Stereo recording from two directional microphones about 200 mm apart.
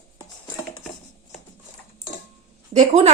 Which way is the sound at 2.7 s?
35° right (ahead or behind).